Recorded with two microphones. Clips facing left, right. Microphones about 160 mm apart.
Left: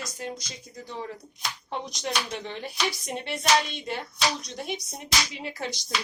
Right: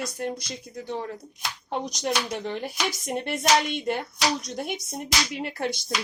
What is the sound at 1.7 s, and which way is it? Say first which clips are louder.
Speech: right 4 dB; 40° right (ahead or behind).